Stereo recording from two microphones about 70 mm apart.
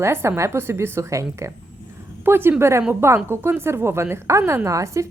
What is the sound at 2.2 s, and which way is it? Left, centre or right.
A woman's voice, right.